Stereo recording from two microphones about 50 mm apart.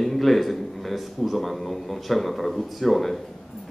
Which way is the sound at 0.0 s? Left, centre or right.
Centre.